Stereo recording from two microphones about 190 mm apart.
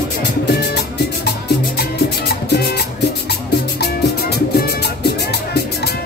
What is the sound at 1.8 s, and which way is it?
Music, 55° left (ahead or behind).